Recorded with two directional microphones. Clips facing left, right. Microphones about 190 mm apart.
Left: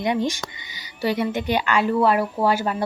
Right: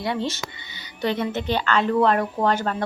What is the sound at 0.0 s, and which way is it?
A woman's voice, 15° left (ahead or behind).